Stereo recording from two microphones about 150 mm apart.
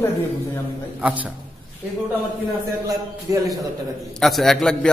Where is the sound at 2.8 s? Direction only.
25° right (ahead or behind).